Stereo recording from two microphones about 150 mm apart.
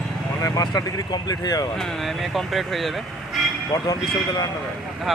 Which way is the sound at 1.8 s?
Centre (ahead or behind).